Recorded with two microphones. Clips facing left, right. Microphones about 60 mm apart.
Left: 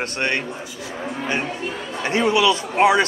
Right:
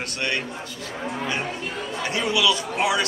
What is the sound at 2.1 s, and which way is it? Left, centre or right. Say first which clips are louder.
Speech: left 5 dB; left.